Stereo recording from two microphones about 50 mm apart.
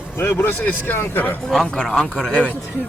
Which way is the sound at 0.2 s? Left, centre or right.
Left.